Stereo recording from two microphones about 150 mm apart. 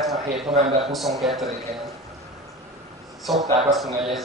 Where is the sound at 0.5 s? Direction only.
45° right (ahead or behind).